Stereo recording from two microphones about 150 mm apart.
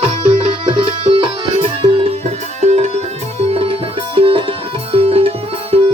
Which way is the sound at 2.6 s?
50° right (ahead or behind).